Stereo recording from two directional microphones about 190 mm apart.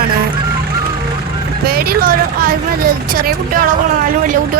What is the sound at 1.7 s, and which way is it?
Speech, 55° right (ahead or behind).